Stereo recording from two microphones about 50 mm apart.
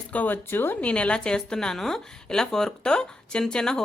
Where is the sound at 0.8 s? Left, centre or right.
Left.